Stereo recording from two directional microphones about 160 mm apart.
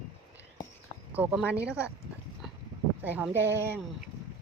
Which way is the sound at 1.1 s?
10° right (ahead or behind).